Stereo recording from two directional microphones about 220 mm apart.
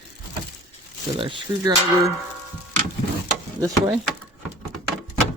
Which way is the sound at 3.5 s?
15° right (ahead or behind).